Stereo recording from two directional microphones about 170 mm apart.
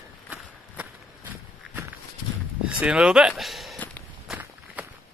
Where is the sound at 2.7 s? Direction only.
5° right (ahead or behind).